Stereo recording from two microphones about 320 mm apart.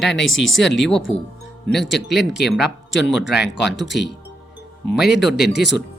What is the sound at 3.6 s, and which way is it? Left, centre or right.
Speech, left.